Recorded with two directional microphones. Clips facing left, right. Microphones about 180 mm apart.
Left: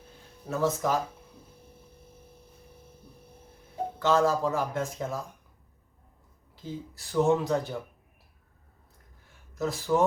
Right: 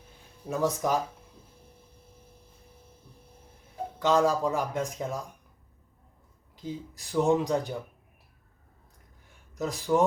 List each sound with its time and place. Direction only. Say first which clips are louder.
0.5 s speech: even; 15° right (ahead or behind)
4.0 s speech: even; 15° right (ahead or behind)
6.6 s speech: right 1 dB; 15° right (ahead or behind)
9.6 s speech: even; 15° right (ahead or behind)